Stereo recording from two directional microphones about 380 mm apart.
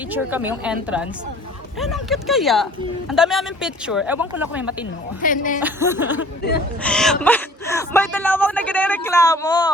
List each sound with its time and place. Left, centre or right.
0.1 s speech: centre
5.2 s speech: left
5.6 s speech: centre